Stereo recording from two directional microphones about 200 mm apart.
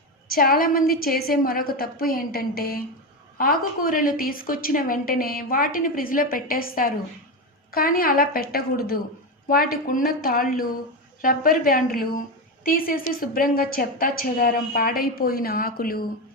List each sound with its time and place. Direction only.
0.3 s a woman's voice: 45° left (ahead or behind)